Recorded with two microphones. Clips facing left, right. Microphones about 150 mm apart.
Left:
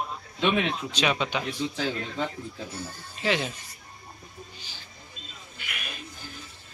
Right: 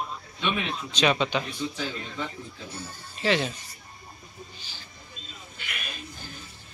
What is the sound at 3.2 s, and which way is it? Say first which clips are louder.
Speech: right 2 dB; 10° left (ahead or behind).